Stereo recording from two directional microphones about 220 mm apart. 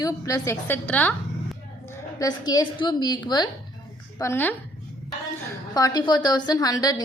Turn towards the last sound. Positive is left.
turn(degrees=15)  # may be behind; listen again after turning